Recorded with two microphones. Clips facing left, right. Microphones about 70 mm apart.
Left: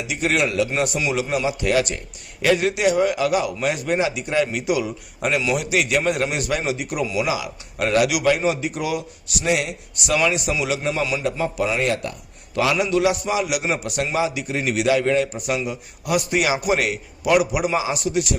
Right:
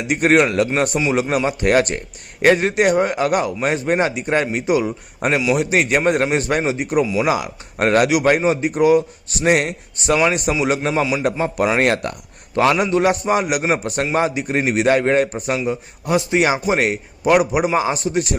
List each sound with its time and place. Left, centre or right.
0.1 s a man's voice: right
9.5 s a man's voice: right
9.9 s a man's voice: right
12.6 s a man's voice: right